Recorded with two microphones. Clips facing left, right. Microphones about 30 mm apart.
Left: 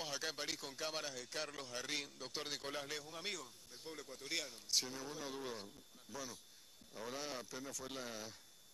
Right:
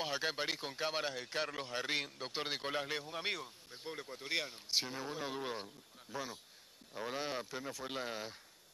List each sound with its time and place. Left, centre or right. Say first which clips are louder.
0.0 s speech: right 6 dB; right